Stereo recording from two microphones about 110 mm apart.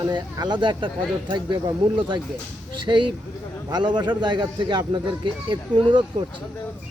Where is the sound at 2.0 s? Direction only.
45° right (ahead or behind).